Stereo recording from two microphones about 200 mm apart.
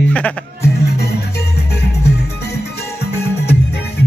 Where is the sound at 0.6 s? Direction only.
55° left (ahead or behind).